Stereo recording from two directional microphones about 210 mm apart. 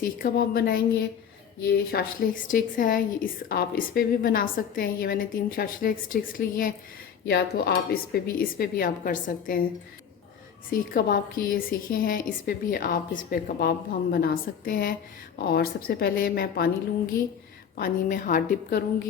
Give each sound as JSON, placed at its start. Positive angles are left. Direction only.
{"t": 0.0, "sound": "a woman's voice", "side_deg": 45}
{"t": 10.7, "sound": "a woman's voice", "side_deg": 40}
{"t": 17.7, "sound": "a woman's voice", "side_deg": 40}